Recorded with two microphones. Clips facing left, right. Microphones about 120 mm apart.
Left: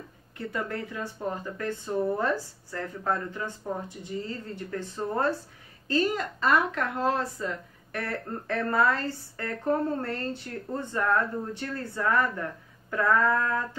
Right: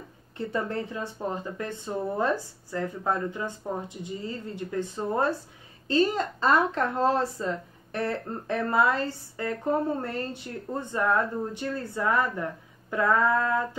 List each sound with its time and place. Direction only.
0.5 s speech: 25° right (ahead or behind)
4.6 s speech: 15° right (ahead or behind)
5.9 s speech: 25° right (ahead or behind)